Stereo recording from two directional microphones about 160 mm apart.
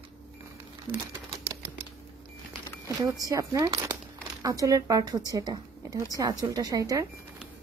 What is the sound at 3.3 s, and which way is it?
A woman's voice, 20° right (ahead or behind).